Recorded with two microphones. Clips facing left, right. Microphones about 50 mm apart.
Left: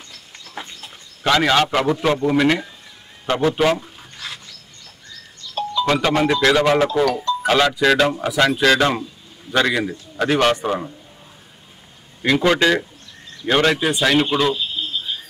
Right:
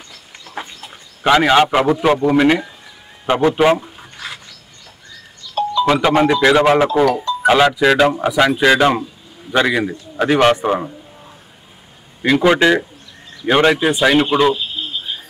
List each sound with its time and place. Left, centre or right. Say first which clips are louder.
0.5 s a man's voice: right 4 dB; centre
3.3 s a sound: right 4 dB; centre
5.8 s a man's voice: right 4 dB; centre
12.2 s a man's voice: right 4 dB; centre